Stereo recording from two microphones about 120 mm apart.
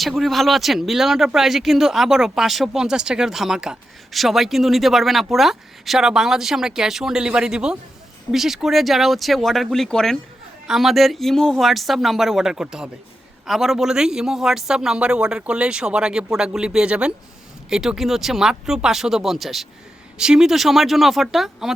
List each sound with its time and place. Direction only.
0.0 s speech: centre (ahead or behind)